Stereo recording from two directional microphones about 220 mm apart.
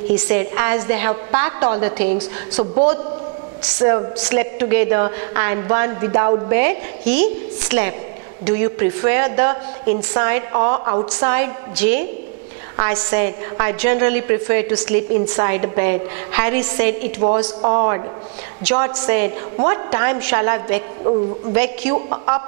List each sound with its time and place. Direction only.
0.1 s a woman's voice: 10° right (ahead or behind)
2.1 s a woman's voice: 30° right (ahead or behind)
4.2 s a woman's voice: 10° right (ahead or behind)
17.2 s a woman's voice: 25° right (ahead or behind)
18.6 s a woman's voice: 10° right (ahead or behind)
21.9 s a woman's voice: 30° right (ahead or behind)